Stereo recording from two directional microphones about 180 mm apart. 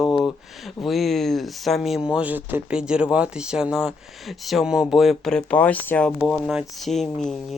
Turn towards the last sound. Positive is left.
turn(degrees=0)  # may be behind; listen again after turning